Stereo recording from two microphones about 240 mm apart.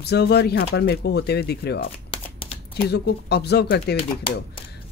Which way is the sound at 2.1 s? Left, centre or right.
Left.